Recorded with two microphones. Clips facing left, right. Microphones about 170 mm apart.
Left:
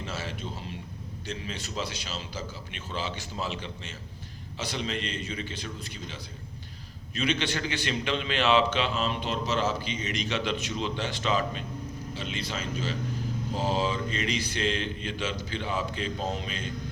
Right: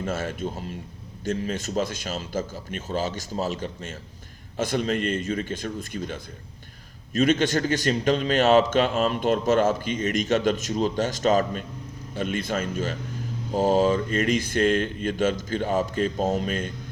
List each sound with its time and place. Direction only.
0.0 s a man's voice: 50° right (ahead or behind)